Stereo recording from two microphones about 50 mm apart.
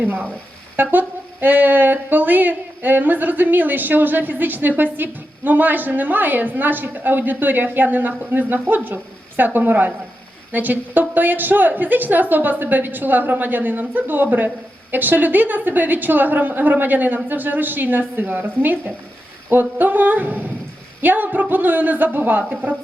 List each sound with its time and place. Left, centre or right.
0.0 s a woman's voice: right